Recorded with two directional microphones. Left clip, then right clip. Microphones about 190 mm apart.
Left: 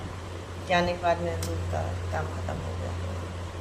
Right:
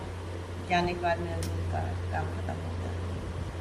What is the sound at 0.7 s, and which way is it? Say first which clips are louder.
Speech: left 3 dB; 50° left (ahead or behind).